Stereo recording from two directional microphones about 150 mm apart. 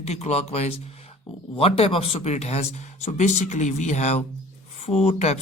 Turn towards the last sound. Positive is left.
turn(degrees=45)  # may be behind; listen again after turning